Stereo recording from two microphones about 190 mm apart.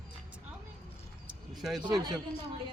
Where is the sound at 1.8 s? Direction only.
20° right (ahead or behind).